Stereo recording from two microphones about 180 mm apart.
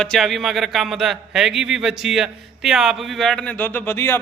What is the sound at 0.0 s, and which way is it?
A man's voice, centre (ahead or behind).